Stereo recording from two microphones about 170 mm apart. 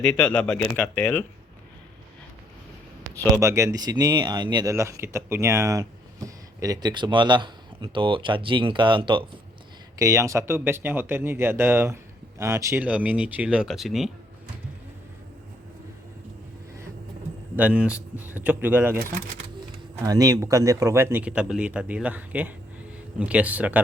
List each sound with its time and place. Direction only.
0.0 s speech: 5° left (ahead or behind)
3.4 s speech: 15° right (ahead or behind)
10.0 s speech: 20° right (ahead or behind); by 14.1 s centre (ahead or behind)
17.6 s speech: 5° right (ahead or behind)
20.0 s speech: 20° right (ahead or behind)